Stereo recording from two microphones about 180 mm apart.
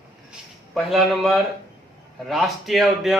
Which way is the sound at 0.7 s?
Centre (ahead or behind).